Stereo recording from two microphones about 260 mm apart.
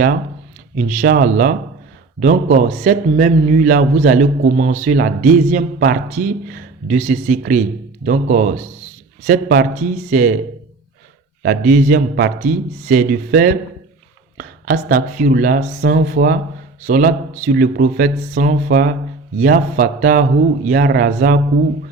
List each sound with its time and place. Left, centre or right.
0.8 s a man's voice: right
11.4 s a man's voice: right